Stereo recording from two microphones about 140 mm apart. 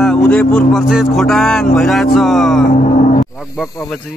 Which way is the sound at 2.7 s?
75° left (ahead or behind).